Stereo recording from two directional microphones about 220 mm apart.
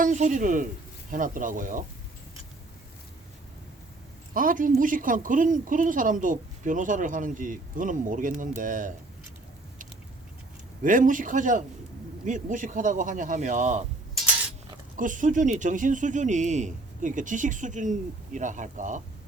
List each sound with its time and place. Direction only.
0.0 s speech: 35° right (ahead or behind)
4.4 s speech: 40° right (ahead or behind)
10.8 s speech: 35° right (ahead or behind)
14.9 s speech: 35° right (ahead or behind)